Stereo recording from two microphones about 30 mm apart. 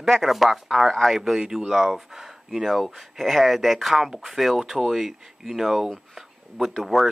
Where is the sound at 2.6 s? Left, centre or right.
Centre.